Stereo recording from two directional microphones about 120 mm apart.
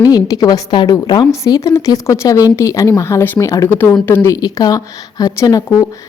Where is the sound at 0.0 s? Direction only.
30° left (ahead or behind).